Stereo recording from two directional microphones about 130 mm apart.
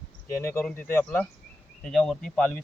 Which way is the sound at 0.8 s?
15° left (ahead or behind).